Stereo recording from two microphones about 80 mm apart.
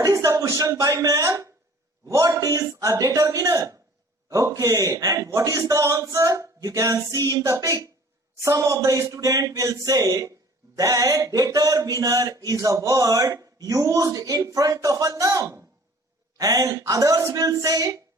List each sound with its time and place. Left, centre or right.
0.0 s speech: right